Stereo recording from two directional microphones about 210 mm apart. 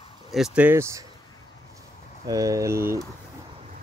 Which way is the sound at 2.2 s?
15° right (ahead or behind).